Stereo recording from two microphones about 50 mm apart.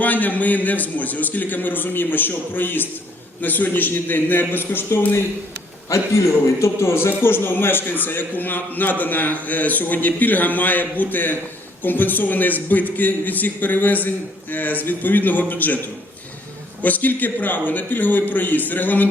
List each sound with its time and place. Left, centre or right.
0.0 s a man's voice: left
5.9 s a man's voice: left
16.8 s a man's voice: left